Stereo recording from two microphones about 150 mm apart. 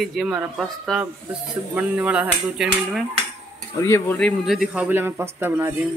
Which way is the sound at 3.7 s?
20° left (ahead or behind).